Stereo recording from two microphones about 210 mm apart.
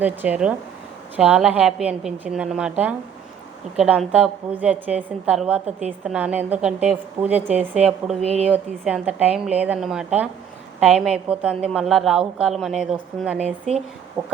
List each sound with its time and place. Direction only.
0.0 s a woman's voice: 10° right (ahead or behind)
8.2 s a woman's voice: 30° right (ahead or behind)
8.4 s a woman's voice: 5° right (ahead or behind)